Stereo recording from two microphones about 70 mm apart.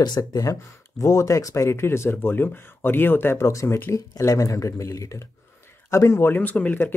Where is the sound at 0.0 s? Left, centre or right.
Left.